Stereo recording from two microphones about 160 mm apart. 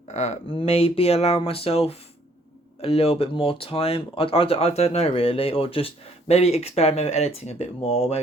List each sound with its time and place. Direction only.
0.1 s speech: 40° left (ahead or behind)